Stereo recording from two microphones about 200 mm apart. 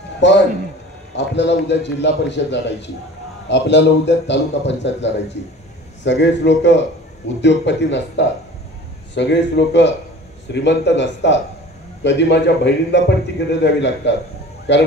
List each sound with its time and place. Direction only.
0.2 s a man's voice: 65° left (ahead or behind)